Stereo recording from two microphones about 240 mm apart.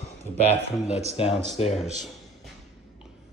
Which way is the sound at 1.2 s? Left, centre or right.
Left.